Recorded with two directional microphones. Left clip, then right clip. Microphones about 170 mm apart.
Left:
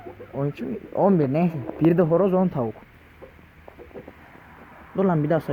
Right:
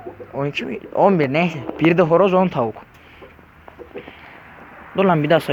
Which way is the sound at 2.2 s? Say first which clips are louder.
Right 6 dB; 35° left (ahead or behind).